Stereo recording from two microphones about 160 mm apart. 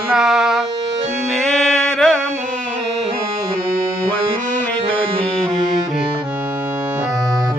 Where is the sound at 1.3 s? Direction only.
Centre (ahead or behind).